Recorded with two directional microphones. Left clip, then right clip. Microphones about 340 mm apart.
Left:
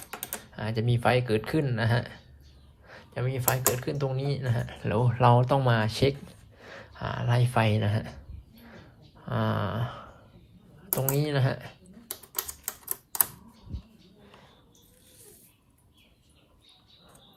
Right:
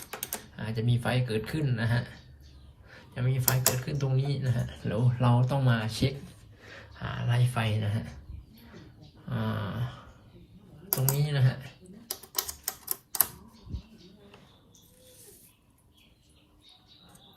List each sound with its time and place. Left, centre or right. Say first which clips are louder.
0.1 s speech: even; centre
9.3 s a sound: left 6 dB; centre
11.1 s speech: left 6 dB; centre